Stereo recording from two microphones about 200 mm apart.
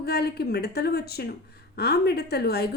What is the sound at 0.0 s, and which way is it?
A woman's voice, 55° left (ahead or behind).